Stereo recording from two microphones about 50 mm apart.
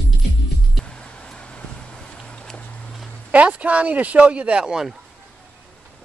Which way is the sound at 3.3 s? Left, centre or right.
Right.